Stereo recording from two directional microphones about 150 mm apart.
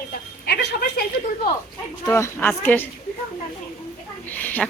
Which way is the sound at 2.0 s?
20° left (ahead or behind).